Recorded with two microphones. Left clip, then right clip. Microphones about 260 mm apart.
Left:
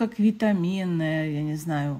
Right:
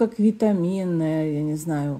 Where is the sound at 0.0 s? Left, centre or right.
Centre.